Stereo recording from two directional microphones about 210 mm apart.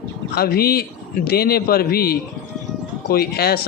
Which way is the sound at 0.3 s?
45° left (ahead or behind).